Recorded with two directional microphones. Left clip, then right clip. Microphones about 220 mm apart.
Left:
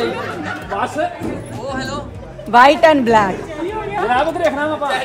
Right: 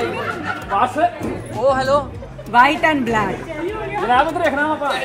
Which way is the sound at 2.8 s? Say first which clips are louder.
Left 6 dB; 45° left (ahead or behind).